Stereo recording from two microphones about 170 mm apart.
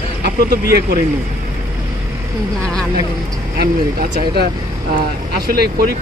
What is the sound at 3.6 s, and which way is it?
Speech, 65° right (ahead or behind).